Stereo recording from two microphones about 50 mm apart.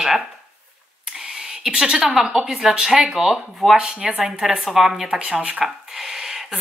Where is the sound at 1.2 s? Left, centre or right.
Centre.